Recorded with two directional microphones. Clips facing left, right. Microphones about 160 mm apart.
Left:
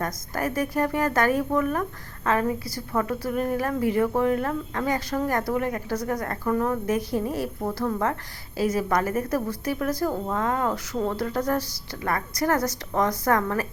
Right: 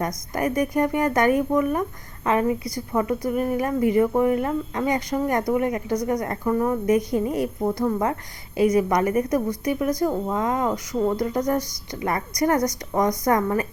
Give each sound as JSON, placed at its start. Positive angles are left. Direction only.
{"t": 0.3, "sound": "speech", "side_deg": -15}